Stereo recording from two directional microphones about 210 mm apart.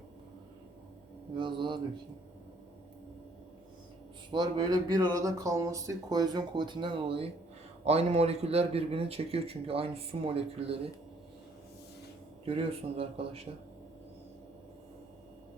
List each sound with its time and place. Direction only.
1.4 s speech: 20° right (ahead or behind)
4.3 s speech: 20° right (ahead or behind)
12.5 s speech: 25° right (ahead or behind)